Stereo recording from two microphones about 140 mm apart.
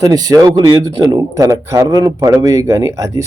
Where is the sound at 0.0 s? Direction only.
25° right (ahead or behind).